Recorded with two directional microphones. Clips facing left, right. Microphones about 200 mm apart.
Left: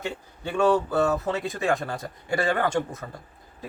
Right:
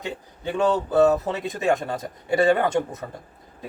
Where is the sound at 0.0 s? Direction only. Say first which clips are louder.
Right 2 dB; 20° right (ahead or behind).